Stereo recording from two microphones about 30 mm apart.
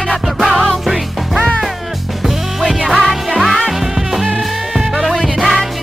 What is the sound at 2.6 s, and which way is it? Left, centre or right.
Music, centre.